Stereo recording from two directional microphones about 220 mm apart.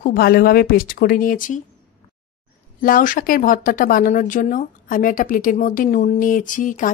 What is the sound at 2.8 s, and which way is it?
Speech, 40° left (ahead or behind).